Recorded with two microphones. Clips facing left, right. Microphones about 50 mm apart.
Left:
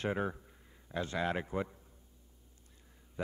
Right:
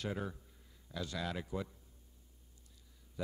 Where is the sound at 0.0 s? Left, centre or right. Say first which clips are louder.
Left 6 dB; left.